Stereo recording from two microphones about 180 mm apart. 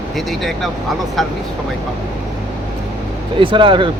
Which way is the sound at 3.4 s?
30° right (ahead or behind).